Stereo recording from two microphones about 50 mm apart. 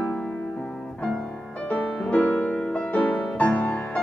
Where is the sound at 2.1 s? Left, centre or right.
Left.